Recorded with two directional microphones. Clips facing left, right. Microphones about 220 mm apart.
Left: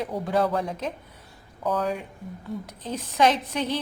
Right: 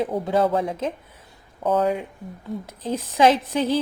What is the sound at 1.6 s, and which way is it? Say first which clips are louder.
A woman's voice: right 5 dB; 25° right (ahead or behind).